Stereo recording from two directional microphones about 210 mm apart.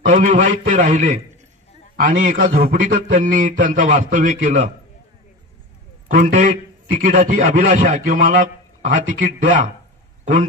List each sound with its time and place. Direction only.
0.0 s a man's voice: 40° right (ahead or behind)
6.0 s a man's voice: 40° right (ahead or behind)